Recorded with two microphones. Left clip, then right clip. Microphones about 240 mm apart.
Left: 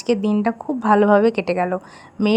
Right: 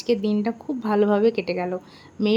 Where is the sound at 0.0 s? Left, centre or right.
Left.